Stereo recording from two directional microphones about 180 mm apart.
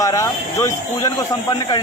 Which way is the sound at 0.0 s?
20° left (ahead or behind).